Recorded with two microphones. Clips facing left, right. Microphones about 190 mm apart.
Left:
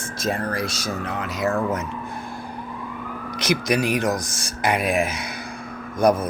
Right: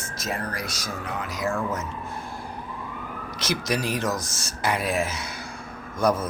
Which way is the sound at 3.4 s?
15° left (ahead or behind).